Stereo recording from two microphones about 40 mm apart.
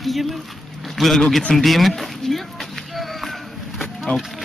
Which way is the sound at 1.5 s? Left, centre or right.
Centre.